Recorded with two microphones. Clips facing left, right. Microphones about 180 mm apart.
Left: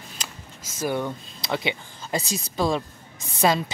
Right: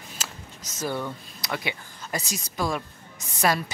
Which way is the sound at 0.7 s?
15° left (ahead or behind).